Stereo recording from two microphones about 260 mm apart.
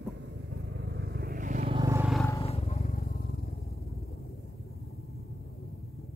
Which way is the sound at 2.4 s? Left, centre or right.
Left.